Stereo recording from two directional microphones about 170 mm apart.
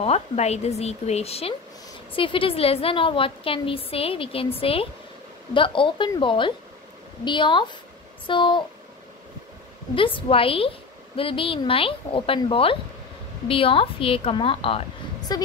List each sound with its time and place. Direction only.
0.0 s a woman's voice: 40° left (ahead or behind)
9.9 s a woman's voice: 30° left (ahead or behind)